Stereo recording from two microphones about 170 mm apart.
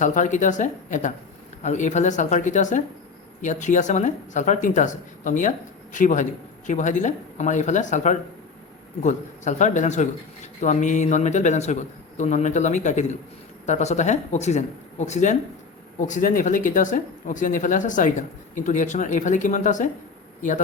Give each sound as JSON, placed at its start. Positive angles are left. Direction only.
{"t": 0.0, "sound": "speech", "side_deg": 50}